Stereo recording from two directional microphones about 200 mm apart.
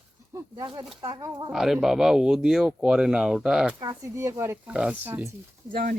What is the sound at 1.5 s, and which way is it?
Speech, centre (ahead or behind).